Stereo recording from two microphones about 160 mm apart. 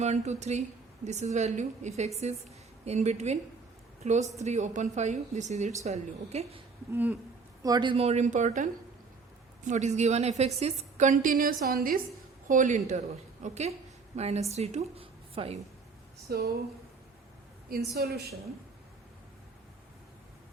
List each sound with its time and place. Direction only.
0.0 s a woman's voice: 45° right (ahead or behind)
6.9 s a sound: 10° right (ahead or behind)
7.6 s a woman's voice: 25° right (ahead or behind); by 12.0 s 65° right (ahead or behind)
12.5 s a woman's voice: 50° right (ahead or behind)
16.3 s a woman's voice: 80° right
17.9 s a woman's voice: 80° right